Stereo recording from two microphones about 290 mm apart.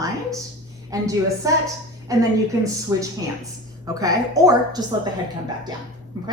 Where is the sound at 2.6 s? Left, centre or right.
Centre.